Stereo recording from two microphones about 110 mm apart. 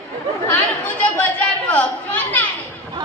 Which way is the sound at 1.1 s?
10° left (ahead or behind).